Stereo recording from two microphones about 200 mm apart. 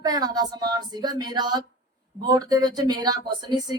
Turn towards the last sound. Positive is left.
turn(degrees=-20)  # may be behind; listen again after turning